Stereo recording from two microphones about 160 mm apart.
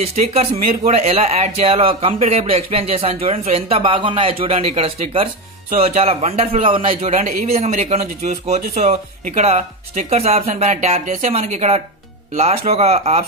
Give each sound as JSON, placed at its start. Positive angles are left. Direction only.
{"t": 0.0, "sound": "speech", "side_deg": -40}